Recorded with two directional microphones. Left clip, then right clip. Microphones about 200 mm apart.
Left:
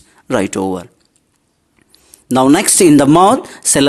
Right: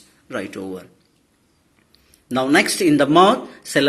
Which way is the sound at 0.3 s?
50° left (ahead or behind).